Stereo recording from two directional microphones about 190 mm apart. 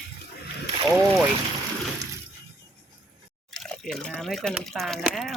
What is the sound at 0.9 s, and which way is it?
Speech, centre (ahead or behind).